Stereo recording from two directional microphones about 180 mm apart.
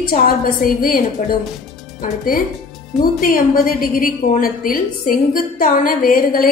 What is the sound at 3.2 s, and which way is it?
A woman's voice, 50° left (ahead or behind).